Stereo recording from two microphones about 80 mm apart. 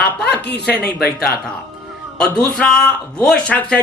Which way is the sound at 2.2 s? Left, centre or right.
Centre.